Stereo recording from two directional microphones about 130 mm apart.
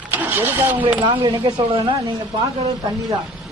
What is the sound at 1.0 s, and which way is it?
Speech, 35° right (ahead or behind).